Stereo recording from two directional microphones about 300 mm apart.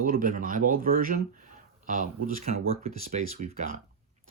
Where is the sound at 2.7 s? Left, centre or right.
Right.